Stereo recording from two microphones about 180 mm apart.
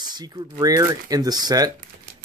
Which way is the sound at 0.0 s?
20° right (ahead or behind).